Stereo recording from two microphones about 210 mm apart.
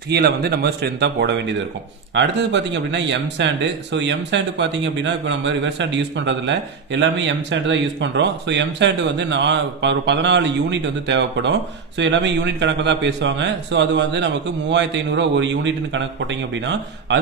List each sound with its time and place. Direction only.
0.1 s speech: 50° right (ahead or behind)